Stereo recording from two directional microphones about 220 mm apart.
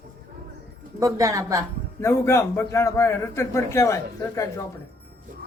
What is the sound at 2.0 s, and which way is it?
A man's voice, 10° left (ahead or behind).